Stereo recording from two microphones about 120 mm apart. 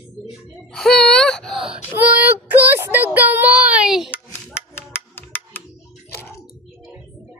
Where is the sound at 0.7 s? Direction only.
5° left (ahead or behind).